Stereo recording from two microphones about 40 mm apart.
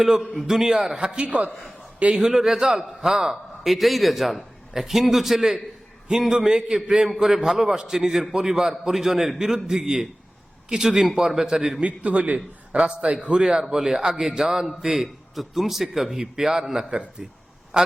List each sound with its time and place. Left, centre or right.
0.0 s a man's voice: centre; by 1.2 s right
1.2 s a man's voice: right
2.0 s a man's voice: right
2.2 s a man's voice: centre
9.6 s a man's voice: centre
11.8 s a man's voice: right; by 17.3 s centre